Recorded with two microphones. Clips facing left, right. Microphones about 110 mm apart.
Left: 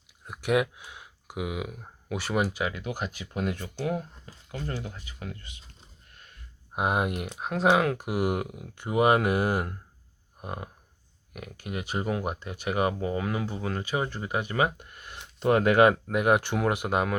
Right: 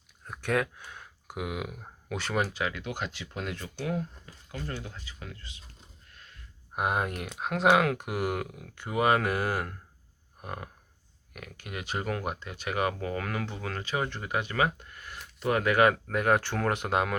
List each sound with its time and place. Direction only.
0.3 s speech: 15° left (ahead or behind)
6.7 s speech: 20° left (ahead or behind)
7.2 s speech: 5° left (ahead or behind)